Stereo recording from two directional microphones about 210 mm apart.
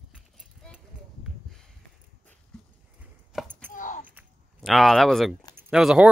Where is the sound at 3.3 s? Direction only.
10° right (ahead or behind).